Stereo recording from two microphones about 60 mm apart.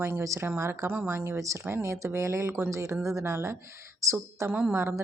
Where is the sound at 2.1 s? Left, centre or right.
Right.